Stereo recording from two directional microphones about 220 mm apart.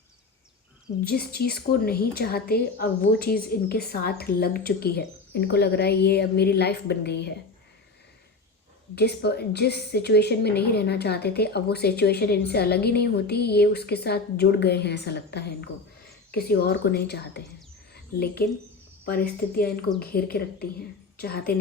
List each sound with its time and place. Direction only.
1.0 s a woman's voice: 45° left (ahead or behind)
9.0 s a woman's voice: 50° left (ahead or behind)
20.0 s a woman's voice: 45° left (ahead or behind)